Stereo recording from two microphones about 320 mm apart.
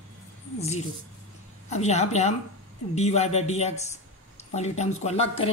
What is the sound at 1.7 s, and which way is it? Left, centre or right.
A man's voice, left.